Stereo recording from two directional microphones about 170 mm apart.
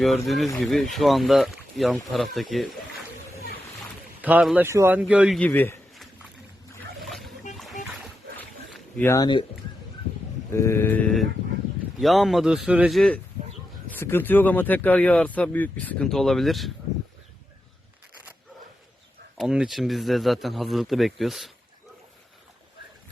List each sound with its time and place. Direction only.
0.3 s speech: centre (ahead or behind)
4.2 s speech: 10° right (ahead or behind)
5.4 s speech: 10° left (ahead or behind)
7.0 s a sound: centre (ahead or behind)
7.5 s music: centre (ahead or behind)
8.4 s boat: 10° left (ahead or behind)
9.1 s speech: 25° left (ahead or behind)
10.5 s speech: 15° left (ahead or behind)
13.9 s speech: 10° left (ahead or behind)
19.4 s speech: centre (ahead or behind)